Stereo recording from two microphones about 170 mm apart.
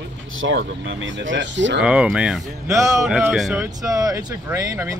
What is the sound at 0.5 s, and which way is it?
Speech, 90° right.